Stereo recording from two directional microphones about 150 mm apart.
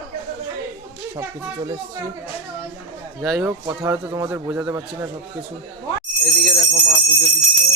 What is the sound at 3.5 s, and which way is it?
A man's voice, 20° right (ahead or behind).